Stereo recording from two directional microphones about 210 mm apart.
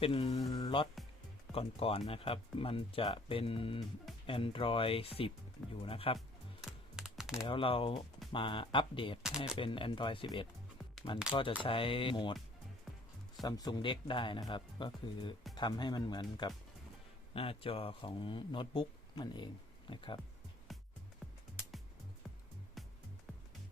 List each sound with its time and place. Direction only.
0.0 s speech: 25° left (ahead or behind)
6.1 s music: centre (ahead or behind)
7.4 s speech: 25° left (ahead or behind)
13.4 s speech: 20° left (ahead or behind)
20.7 s music: centre (ahead or behind)